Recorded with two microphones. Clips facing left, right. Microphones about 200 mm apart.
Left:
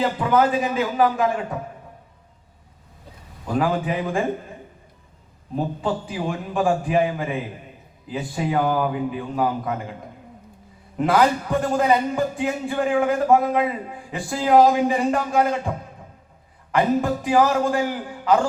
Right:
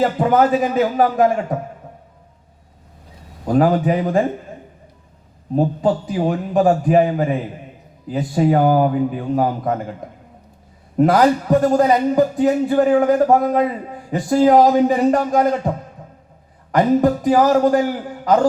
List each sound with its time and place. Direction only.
0.0 s a man's voice: 45° right (ahead or behind)
3.4 s a man's voice: 40° right (ahead or behind)
5.5 s a man's voice: 40° right (ahead or behind)
10.9 s a man's voice: 40° right (ahead or behind)
16.7 s a man's voice: 40° right (ahead or behind)